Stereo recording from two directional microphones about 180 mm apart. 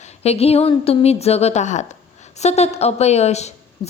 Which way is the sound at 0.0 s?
35° left (ahead or behind).